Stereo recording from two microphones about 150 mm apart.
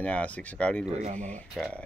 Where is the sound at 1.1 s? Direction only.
10° left (ahead or behind).